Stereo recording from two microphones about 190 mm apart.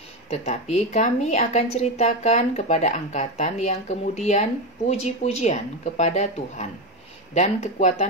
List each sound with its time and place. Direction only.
0.3 s a woman's voice: 35° left (ahead or behind)